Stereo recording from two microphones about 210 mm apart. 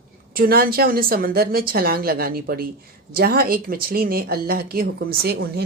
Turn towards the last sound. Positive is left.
turn(degrees=-50)  # may be behind; listen again after turning